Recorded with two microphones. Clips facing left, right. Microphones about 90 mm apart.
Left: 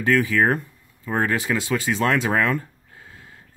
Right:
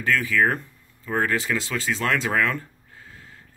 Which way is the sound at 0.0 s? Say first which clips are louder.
Left 2 dB; 20° left (ahead or behind).